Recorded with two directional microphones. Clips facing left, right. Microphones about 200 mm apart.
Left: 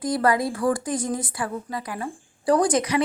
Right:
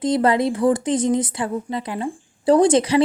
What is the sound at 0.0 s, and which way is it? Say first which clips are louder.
A woman's voice: right 4 dB; 20° right (ahead or behind).